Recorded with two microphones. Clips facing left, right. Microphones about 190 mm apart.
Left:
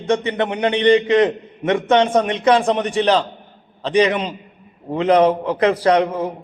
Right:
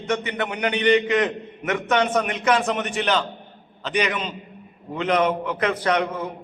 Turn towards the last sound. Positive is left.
turn(degrees=30)  # may be behind; listen again after turning